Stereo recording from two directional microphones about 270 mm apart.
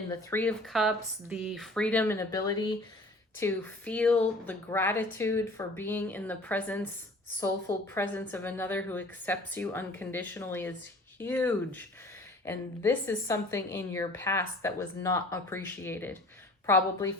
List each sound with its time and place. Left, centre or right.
0.1 s a woman's voice: centre
7.9 s a woman's voice: centre